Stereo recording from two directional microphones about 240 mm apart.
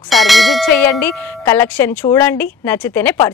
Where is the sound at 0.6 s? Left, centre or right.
Centre.